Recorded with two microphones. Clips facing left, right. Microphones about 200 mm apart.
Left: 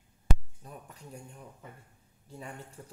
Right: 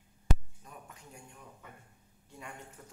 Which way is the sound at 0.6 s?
35° left (ahead or behind).